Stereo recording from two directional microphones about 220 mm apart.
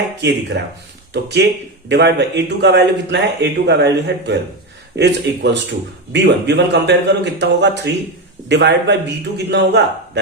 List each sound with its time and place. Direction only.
0.2 s a man's voice: 50° right (ahead or behind)